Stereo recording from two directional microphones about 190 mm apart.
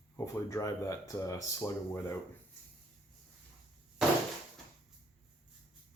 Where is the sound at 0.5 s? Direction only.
15° left (ahead or behind).